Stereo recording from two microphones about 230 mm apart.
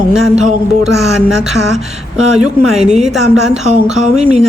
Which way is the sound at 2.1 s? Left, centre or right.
Centre.